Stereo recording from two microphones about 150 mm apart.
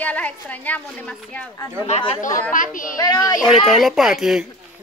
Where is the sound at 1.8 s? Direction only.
45° left (ahead or behind).